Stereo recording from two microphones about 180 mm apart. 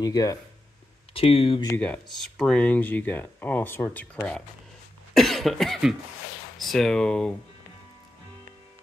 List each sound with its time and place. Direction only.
0.0 s speech: 20° left (ahead or behind)
1.1 s speech: 30° left (ahead or behind)
1.8 s speech: 5° left (ahead or behind)
5.1 s cough: centre (ahead or behind)
6.6 s speech: centre (ahead or behind)